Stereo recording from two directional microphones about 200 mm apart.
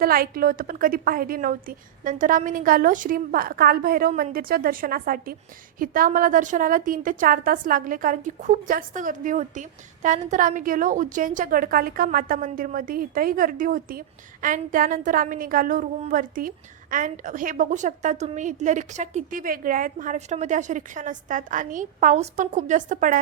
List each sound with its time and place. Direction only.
0.0 s a woman's voice: 45° right (ahead or behind)